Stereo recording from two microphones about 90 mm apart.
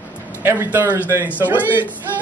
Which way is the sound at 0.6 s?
25° right (ahead or behind).